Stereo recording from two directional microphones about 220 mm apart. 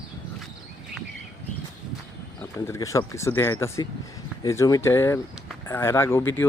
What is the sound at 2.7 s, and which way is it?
Speech, 15° left (ahead or behind).